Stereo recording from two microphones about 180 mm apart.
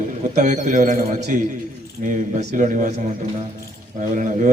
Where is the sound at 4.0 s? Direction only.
45° right (ahead or behind).